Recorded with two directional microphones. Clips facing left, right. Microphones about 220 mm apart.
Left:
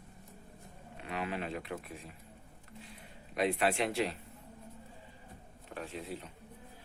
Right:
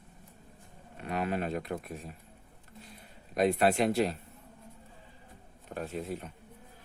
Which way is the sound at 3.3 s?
40° right (ahead or behind).